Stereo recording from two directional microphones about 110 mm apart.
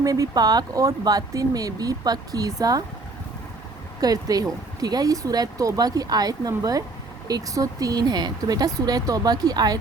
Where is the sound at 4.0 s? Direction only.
35° right (ahead or behind).